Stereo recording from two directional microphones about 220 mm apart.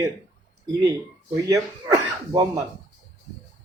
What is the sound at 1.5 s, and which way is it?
Speech, 15° right (ahead or behind).